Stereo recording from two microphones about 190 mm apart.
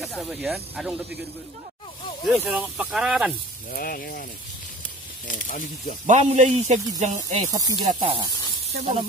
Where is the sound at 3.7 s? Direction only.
50° left (ahead or behind).